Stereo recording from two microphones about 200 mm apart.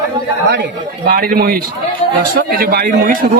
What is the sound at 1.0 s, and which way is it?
A man's voice, 45° right (ahead or behind).